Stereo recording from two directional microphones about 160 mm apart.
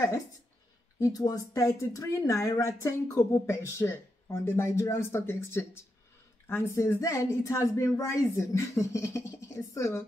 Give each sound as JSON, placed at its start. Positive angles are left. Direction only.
{"t": 0.9, "sound": "speech", "side_deg": 20}